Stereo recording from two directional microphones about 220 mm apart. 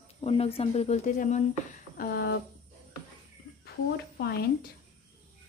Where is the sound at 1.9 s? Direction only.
50° left (ahead or behind).